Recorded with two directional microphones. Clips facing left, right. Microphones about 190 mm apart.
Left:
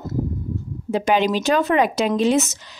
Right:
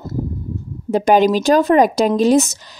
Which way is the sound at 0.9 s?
40° right (ahead or behind).